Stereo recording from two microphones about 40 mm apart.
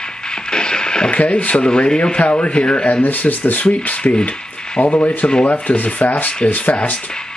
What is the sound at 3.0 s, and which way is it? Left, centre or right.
Speech, left.